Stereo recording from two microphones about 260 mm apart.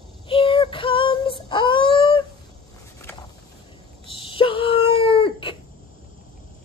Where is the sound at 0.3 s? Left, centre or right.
Centre.